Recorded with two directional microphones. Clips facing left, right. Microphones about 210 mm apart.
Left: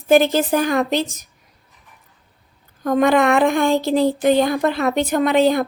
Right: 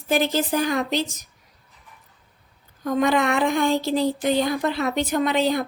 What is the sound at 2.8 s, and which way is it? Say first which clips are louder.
Speech: left 5 dB; 55° left (ahead or behind).